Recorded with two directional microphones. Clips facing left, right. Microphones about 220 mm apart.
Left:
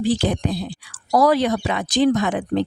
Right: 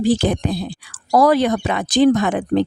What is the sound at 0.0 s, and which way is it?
Speech, 45° right (ahead or behind).